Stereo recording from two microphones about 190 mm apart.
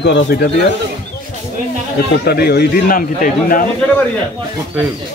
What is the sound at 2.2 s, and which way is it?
A man's voice, 60° left (ahead or behind).